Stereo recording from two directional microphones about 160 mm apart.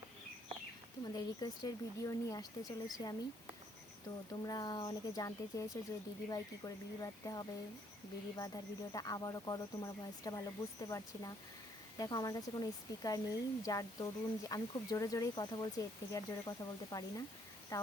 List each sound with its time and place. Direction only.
1.0 s speech: 25° left (ahead or behind)
4.4 s speech: 25° left (ahead or behind)